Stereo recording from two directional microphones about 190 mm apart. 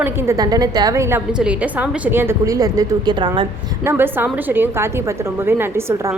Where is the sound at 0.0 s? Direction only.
15° right (ahead or behind).